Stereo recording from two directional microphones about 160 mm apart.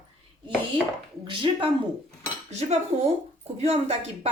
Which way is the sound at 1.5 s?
30° right (ahead or behind).